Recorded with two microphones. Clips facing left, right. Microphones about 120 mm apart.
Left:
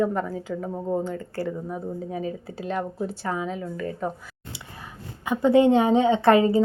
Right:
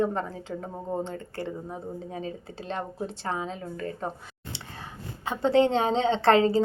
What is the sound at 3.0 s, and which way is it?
Speech, 25° right (ahead or behind).